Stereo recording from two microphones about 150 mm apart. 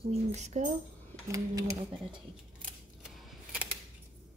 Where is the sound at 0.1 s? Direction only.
50° right (ahead or behind).